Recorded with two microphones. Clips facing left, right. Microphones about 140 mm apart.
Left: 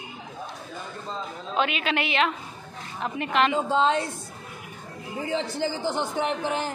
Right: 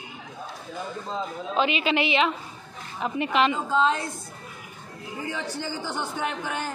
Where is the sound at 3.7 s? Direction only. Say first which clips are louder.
Left 1 dB; 30° left (ahead or behind).